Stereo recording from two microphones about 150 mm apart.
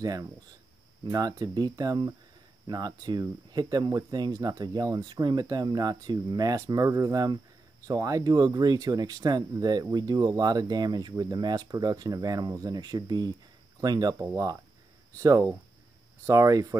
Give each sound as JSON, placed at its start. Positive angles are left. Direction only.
{"t": 0.0, "sound": "speech", "side_deg": -25}